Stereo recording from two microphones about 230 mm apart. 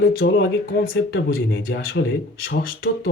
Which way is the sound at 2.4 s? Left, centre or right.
Left.